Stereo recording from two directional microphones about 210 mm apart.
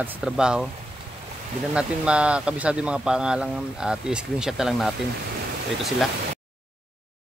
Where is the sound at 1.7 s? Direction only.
5° right (ahead or behind).